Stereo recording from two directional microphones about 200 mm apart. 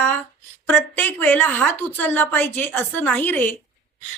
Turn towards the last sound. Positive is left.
turn(degrees=10)  # may be behind; listen again after turning